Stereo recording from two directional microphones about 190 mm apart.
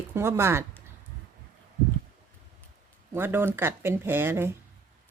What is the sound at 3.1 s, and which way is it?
Speech, 10° right (ahead or behind).